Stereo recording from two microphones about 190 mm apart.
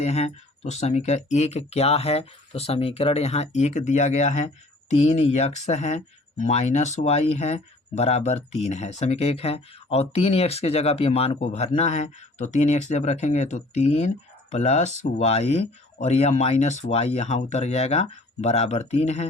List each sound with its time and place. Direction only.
0.0 s speech: 35° left (ahead or behind)